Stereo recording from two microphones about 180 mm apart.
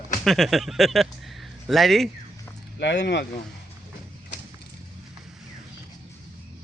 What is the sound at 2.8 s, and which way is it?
Speech, 75° left (ahead or behind).